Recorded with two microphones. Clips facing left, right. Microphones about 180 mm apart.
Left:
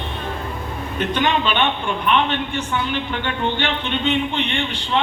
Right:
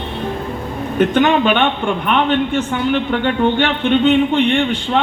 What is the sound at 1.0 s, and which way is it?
A man's voice, 50° right (ahead or behind).